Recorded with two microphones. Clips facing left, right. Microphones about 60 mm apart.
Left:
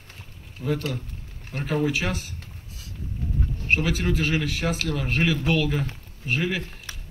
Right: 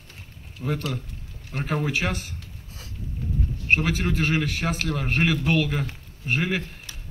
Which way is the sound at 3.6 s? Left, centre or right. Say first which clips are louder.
Right 1 dB; right.